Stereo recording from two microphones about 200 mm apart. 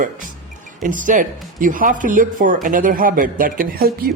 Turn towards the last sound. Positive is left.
turn(degrees=-50)  # may be behind; listen again after turning